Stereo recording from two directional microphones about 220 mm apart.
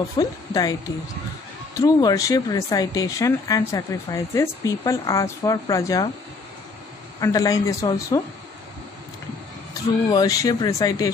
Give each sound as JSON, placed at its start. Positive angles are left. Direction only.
{"t": 0.2, "sound": "speech", "side_deg": 15}
{"t": 1.8, "sound": "speech", "side_deg": 15}
{"t": 7.2, "sound": "speech", "side_deg": 15}
{"t": 10.0, "sound": "speech", "side_deg": 15}